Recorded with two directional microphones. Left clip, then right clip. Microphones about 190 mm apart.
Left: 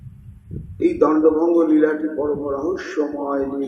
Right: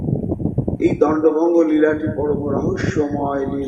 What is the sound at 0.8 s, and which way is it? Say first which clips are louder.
Speech: even; 35° right (ahead or behind).